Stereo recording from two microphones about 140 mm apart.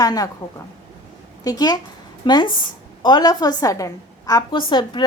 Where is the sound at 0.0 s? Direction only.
25° left (ahead or behind).